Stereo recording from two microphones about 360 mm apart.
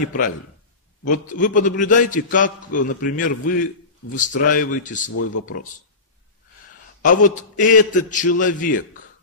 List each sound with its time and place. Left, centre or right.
1.0 s a man's voice: left
7.0 s a man's voice: left